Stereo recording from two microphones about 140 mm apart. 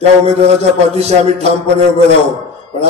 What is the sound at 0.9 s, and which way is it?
Speech, 50° right (ahead or behind).